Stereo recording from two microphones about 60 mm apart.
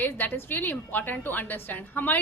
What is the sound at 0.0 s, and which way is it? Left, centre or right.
A woman's voice, left.